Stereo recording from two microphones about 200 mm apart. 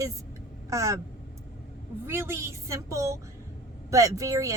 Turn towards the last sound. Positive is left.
turn(degrees=-15)  # may be behind; listen again after turning